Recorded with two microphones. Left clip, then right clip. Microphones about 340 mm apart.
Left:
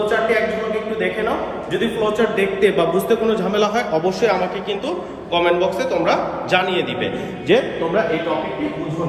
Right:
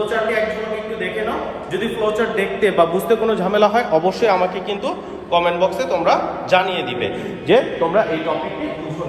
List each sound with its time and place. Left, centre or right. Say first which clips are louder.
1.7 s a man's voice: even; centre; by 4.4 s right
5.3 s a man's voice: right 1 dB; centre
7.4 s a man's voice: right 2 dB; right